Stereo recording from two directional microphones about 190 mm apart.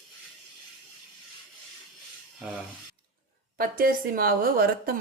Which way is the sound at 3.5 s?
50° right (ahead or behind).